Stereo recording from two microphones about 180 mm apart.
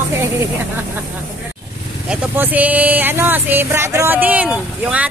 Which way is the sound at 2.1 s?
10° right (ahead or behind).